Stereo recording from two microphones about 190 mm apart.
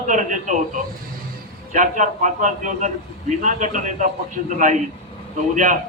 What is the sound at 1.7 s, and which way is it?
A man's voice, 40° right (ahead or behind).